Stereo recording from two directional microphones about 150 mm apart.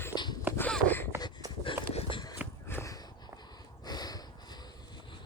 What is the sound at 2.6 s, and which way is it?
Walk, 20° left (ahead or behind).